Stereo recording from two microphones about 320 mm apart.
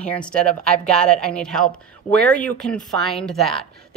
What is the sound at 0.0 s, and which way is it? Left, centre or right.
A woman's voice, centre.